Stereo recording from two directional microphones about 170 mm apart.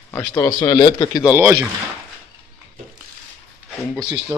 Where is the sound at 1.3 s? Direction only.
15° right (ahead or behind).